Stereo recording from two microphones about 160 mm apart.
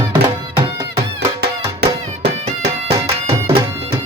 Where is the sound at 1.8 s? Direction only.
90° right.